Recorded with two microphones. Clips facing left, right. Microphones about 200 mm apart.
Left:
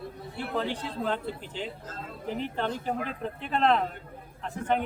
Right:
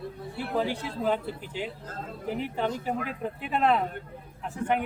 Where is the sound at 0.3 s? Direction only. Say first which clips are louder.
Right 2 dB; 10° right (ahead or behind).